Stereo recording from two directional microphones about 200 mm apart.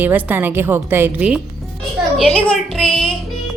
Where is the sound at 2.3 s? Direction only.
5° left (ahead or behind).